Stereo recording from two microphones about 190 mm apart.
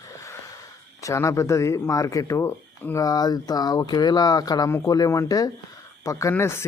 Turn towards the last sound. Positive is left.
turn(degrees=15)  # may be behind; listen again after turning